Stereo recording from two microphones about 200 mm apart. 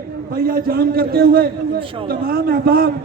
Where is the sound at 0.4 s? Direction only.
50° right (ahead or behind).